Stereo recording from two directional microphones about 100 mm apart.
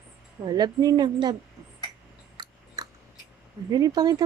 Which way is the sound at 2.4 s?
40° right (ahead or behind).